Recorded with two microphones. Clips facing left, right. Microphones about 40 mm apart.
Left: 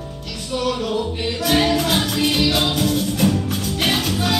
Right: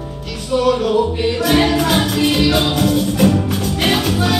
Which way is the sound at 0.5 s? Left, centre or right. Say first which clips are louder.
Right 7 dB; centre.